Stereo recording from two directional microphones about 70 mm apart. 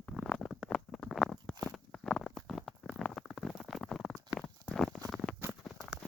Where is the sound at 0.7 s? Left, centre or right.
Centre.